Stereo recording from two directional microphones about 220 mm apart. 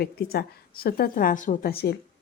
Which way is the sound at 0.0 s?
45° left (ahead or behind).